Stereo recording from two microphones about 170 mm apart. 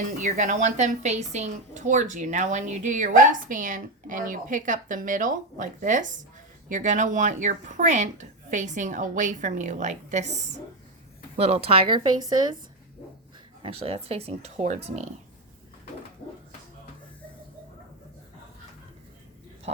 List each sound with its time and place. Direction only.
0.2 s a woman's voice: 50° right (ahead or behind); by 12.5 s 25° right (ahead or behind)
13.6 s speech: 35° right (ahead or behind)